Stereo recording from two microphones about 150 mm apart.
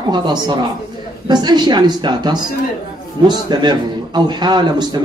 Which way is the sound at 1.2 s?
30° right (ahead or behind).